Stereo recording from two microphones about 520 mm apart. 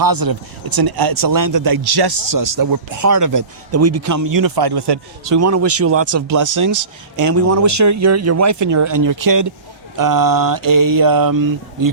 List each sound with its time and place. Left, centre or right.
0.0 s speech: right